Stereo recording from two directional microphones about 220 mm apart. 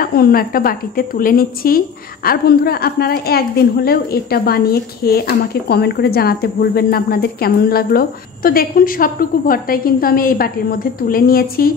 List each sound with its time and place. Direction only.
0.0 s a woman's voice: 45° left (ahead or behind)